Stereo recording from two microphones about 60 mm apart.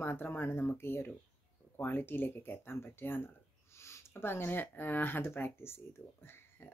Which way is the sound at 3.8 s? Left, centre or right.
Left.